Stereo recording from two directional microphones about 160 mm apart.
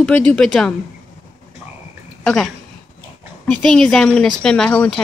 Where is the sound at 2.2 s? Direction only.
5° left (ahead or behind).